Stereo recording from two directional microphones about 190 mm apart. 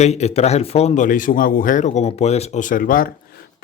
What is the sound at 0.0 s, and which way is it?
Speech, 35° left (ahead or behind).